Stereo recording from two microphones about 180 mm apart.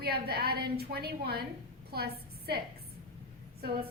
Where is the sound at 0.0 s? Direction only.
60° right (ahead or behind).